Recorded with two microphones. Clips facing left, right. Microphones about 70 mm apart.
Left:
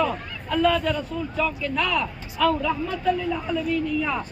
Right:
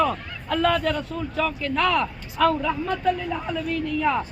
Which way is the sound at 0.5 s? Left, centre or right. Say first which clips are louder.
Even; right.